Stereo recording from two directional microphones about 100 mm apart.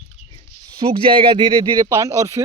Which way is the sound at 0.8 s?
60° right (ahead or behind).